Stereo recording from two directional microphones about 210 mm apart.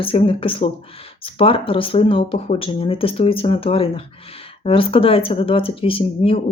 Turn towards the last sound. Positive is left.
turn(degrees=25)  # may be behind; listen again after turning